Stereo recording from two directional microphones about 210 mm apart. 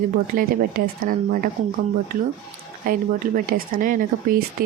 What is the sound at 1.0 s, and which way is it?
Speech, 40° right (ahead or behind).